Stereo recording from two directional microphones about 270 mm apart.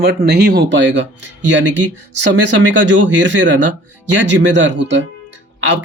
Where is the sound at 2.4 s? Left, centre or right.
Right.